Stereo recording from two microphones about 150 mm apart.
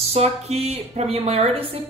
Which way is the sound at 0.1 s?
45° right (ahead or behind).